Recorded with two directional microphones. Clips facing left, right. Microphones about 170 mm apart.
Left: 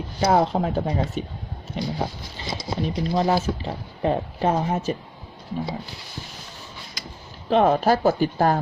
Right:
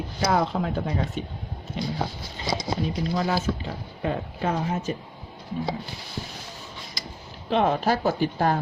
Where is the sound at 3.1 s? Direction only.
35° left (ahead or behind).